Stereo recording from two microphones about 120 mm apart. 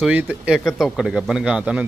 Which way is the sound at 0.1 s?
15° right (ahead or behind).